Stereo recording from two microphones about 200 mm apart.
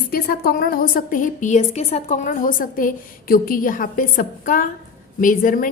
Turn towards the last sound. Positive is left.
turn(degrees=45)  # may be behind; listen again after turning